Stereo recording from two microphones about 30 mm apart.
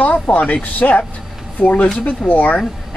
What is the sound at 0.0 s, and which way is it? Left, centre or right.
Speech, left.